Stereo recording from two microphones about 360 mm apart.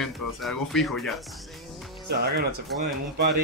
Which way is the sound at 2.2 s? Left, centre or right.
Right.